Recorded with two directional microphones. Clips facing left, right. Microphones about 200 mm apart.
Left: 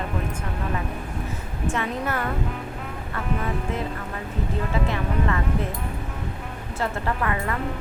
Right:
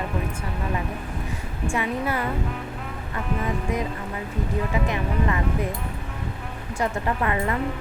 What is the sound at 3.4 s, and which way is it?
A woman's voice, 15° right (ahead or behind).